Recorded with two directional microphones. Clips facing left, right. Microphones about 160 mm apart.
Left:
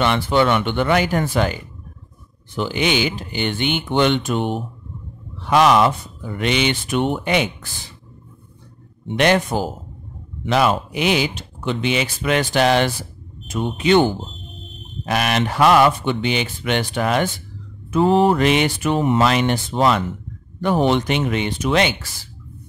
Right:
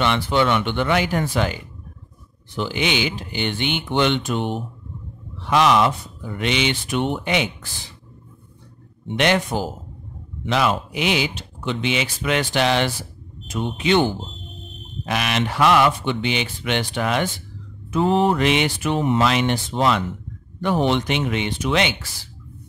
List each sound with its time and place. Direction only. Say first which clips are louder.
0.0 s speech: left 2 dB; 45° left (ahead or behind)
9.1 s speech: left 3 dB; 45° left (ahead or behind)